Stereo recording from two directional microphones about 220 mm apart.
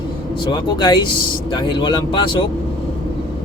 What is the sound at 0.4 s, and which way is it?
Speech, 20° left (ahead or behind).